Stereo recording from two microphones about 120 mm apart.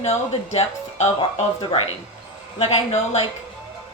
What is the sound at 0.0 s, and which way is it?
A woman's voice, 60° left (ahead or behind).